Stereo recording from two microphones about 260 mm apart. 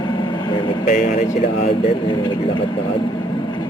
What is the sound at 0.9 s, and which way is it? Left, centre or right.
Speech, left.